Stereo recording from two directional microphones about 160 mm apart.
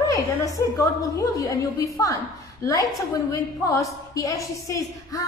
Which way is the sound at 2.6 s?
20° left (ahead or behind).